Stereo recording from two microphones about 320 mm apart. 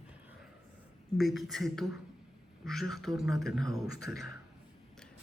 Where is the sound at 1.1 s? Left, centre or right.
Centre.